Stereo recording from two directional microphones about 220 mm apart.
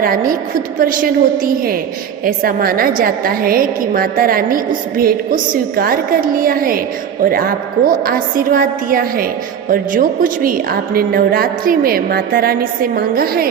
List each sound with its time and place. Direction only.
0.0 s a woman's voice: 40° right (ahead or behind)